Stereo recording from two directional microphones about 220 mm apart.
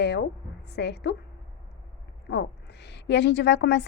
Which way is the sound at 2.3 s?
50° left (ahead or behind).